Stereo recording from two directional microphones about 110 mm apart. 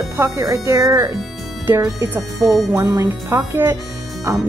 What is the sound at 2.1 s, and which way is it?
Speech, 25° right (ahead or behind).